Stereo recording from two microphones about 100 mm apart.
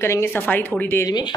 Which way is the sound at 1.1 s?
45° left (ahead or behind).